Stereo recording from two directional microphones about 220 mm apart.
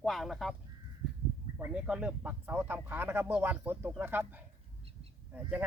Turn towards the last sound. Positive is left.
turn(degrees=-10)  # may be behind; listen again after turning